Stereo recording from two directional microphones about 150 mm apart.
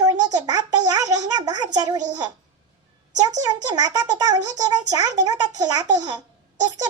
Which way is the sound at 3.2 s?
25° right (ahead or behind).